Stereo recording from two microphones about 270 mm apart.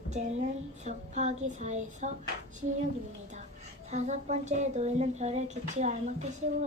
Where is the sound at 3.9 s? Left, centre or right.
Right.